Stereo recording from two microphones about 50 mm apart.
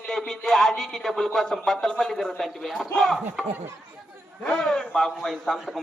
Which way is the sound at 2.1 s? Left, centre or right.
Centre.